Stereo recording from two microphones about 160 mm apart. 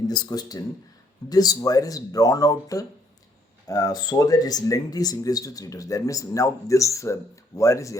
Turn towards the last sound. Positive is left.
turn(degrees=20)  # may be behind; listen again after turning